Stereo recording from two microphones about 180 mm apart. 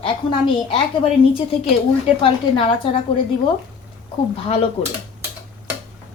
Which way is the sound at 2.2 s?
30° left (ahead or behind).